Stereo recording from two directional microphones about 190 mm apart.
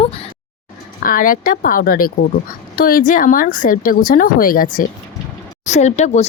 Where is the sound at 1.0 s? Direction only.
50° left (ahead or behind).